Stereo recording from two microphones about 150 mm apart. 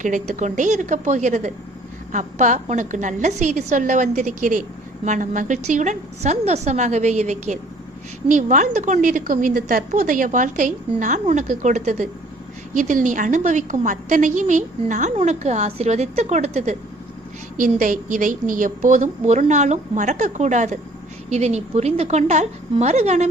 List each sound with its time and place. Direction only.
0.0 s a woman's voice: 55° right (ahead or behind)
17.6 s a woman's voice: 65° right (ahead or behind); by 23.3 s 50° right (ahead or behind)